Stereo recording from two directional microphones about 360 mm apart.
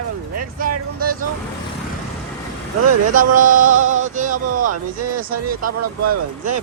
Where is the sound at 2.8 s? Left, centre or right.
Right.